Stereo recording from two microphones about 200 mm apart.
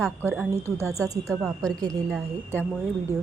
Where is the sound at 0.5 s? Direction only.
15° right (ahead or behind).